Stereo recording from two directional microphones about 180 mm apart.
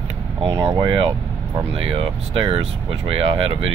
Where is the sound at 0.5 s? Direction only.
25° right (ahead or behind).